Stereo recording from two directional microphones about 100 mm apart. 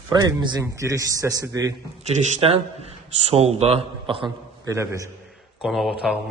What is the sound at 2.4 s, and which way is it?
Speech, 75° right (ahead or behind).